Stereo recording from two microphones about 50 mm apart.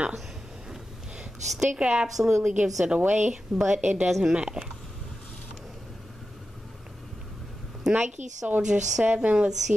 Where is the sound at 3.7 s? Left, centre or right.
Right.